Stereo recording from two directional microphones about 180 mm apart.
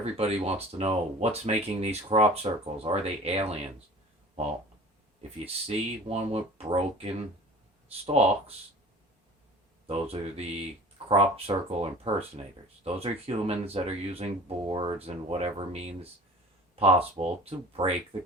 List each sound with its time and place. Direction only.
0.0 s speech: 35° right (ahead or behind)
5.5 s speech: 35° right (ahead or behind)
9.8 s speech: 35° right (ahead or behind)